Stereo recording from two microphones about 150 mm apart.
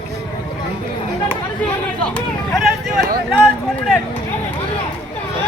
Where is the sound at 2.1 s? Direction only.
5° left (ahead or behind).